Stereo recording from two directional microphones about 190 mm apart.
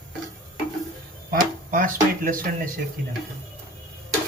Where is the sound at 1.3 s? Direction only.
45° right (ahead or behind).